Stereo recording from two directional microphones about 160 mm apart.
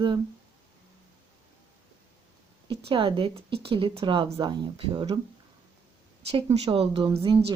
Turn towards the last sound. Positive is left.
turn(degrees=-30)  # may be behind; listen again after turning